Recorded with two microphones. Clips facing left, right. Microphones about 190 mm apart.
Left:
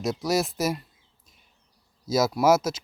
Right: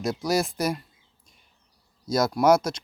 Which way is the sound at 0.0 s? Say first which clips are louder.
Even; centre (ahead or behind).